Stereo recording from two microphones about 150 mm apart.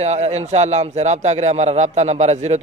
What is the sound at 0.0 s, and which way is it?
A man's voice, 50° right (ahead or behind).